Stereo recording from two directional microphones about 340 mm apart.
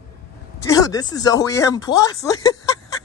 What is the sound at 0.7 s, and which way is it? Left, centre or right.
Speech, centre.